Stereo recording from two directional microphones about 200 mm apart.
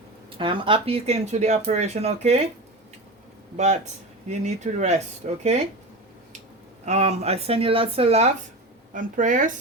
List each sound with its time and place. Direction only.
0.3 s speech: 25° right (ahead or behind)
4.3 s speech: 35° right (ahead or behind)
6.8 s speech: 35° right (ahead or behind)
8.9 s speech: 40° right (ahead or behind)